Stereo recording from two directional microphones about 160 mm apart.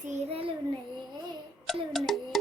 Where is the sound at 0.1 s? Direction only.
40° right (ahead or behind).